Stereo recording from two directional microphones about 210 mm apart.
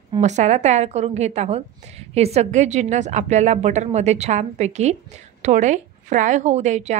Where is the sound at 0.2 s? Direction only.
35° right (ahead or behind).